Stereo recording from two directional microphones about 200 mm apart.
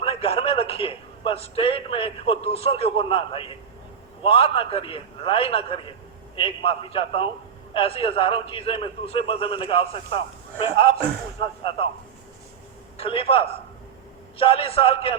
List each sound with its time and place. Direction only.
0.0 s a man's voice: 30° left (ahead or behind)
13.0 s a man's voice: 30° left (ahead or behind)